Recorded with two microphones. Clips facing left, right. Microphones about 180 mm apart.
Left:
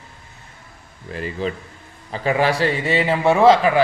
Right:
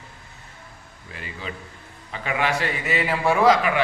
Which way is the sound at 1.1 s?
40° left (ahead or behind).